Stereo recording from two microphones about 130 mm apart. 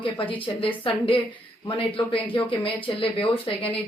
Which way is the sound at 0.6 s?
45° left (ahead or behind).